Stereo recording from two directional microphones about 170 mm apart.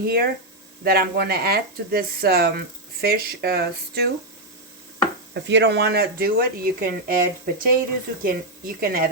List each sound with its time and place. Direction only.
0.0 s speech: 65° right (ahead or behind)
5.3 s speech: 85° right; by 9.0 s 60° right (ahead or behind)